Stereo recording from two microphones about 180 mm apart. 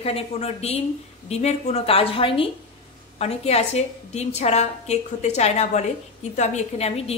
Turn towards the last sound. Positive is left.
turn(degrees=35)  # may be behind; listen again after turning